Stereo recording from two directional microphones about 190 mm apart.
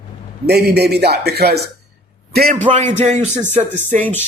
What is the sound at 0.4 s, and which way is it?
Speech, 60° right (ahead or behind).